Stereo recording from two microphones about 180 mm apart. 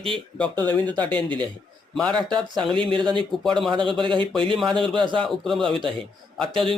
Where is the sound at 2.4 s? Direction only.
25° right (ahead or behind).